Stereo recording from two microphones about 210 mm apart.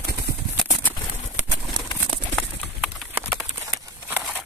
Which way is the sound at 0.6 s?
10° left (ahead or behind).